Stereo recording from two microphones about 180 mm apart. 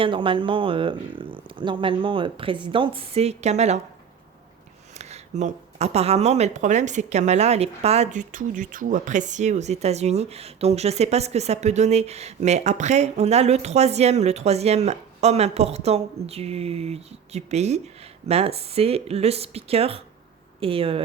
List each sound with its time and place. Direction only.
0.0 s speech: 25° right (ahead or behind)
4.9 s speech: 40° right (ahead or behind)